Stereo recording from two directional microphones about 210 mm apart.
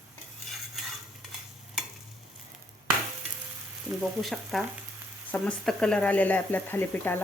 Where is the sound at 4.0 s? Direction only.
Centre (ahead or behind).